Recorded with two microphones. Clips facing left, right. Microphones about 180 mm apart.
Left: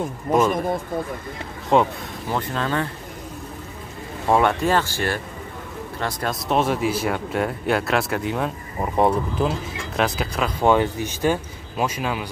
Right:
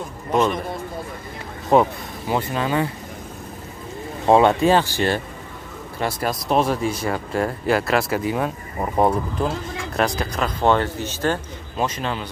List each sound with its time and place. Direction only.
1.7 s speech: 10° right (ahead or behind)
4.3 s speech: 20° right (ahead or behind)
5.9 s speech: 5° right (ahead or behind); by 12.3 s 10° left (ahead or behind)